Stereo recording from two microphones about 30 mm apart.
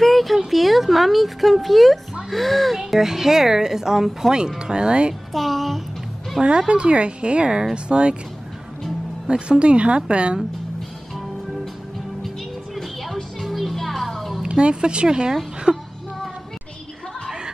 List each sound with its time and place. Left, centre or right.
0.0 s a sound: centre
0.5 s speech: centre
2.9 s a woman's voice: centre
4.6 s speech: right
5.3 s speech: centre
6.4 s a woman's voice: centre
6.7 s a woman's voice: right
9.3 s a woman's voice: right
13.0 s music: centre
14.4 s speech: right